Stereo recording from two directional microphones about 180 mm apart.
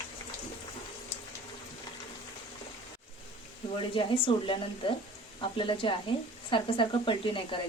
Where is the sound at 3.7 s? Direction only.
30° left (ahead or behind).